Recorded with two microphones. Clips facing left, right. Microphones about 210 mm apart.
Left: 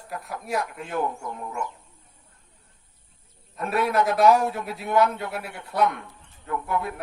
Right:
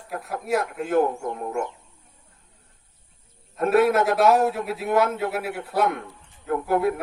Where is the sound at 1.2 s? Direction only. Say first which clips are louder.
Right 5 dB; 50° right (ahead or behind).